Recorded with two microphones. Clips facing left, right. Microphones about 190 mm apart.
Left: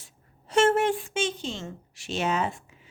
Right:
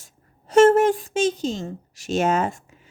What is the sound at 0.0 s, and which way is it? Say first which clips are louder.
A woman's voice: right 2 dB; 40° right (ahead or behind).